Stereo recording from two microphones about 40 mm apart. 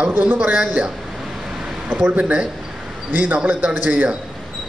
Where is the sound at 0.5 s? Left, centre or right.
Right.